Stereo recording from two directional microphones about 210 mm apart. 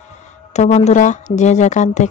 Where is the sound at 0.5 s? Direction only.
30° left (ahead or behind).